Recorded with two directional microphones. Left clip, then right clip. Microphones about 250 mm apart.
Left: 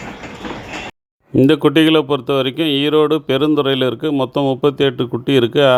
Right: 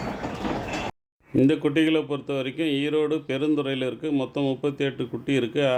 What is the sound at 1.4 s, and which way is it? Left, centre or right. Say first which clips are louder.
A man's voice: left 9 dB; left.